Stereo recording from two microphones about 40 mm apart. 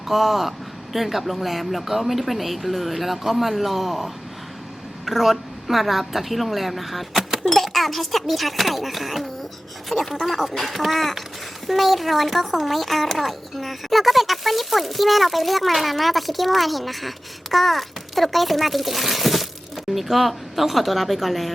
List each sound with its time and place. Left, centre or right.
0.1 s a child's voice: centre
7.4 s a child's voice: centre